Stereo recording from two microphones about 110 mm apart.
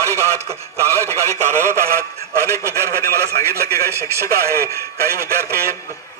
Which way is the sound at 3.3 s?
30° left (ahead or behind).